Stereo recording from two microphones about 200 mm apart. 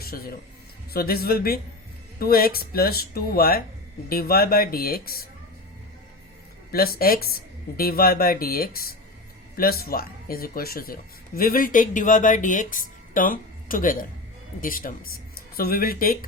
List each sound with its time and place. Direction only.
0.0 s a man's voice: 50° left (ahead or behind)
6.7 s speech: 50° left (ahead or behind)